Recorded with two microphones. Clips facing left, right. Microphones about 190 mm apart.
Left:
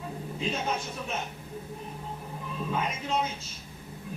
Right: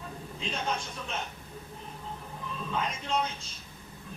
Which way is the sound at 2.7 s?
5° left (ahead or behind).